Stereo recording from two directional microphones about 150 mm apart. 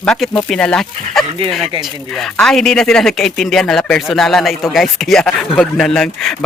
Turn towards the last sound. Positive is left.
turn(degrees=5)  # may be behind; listen again after turning